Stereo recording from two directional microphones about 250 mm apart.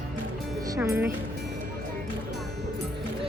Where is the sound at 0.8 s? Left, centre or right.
Centre.